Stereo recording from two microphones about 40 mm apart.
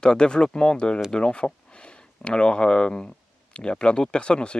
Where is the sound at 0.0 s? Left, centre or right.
Left.